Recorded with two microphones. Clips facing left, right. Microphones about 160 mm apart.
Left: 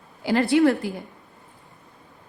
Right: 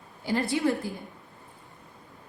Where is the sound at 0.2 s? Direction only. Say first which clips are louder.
Left 8 dB; 90° left.